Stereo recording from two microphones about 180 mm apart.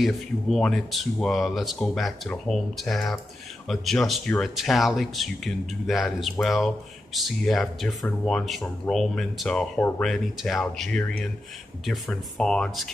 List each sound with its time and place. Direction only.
0.0 s speech: centre (ahead or behind)